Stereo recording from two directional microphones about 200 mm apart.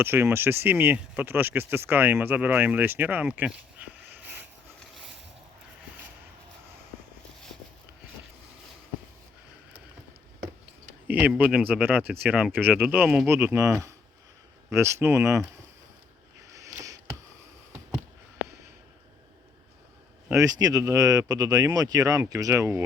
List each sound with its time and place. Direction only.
0.0 s speech: 10° right (ahead or behind)
11.1 s speech: 10° right (ahead or behind)
16.6 s a sound: 15° right (ahead or behind)
20.2 s speech: 15° right (ahead or behind)